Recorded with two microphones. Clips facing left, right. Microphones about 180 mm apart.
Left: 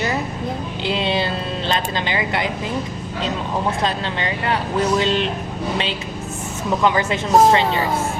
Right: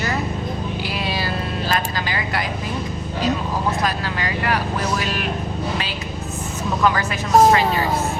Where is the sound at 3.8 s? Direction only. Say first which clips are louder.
Left 1 dB; 25° left (ahead or behind).